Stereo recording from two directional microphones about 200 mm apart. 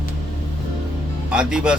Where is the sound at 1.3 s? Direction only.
5° right (ahead or behind).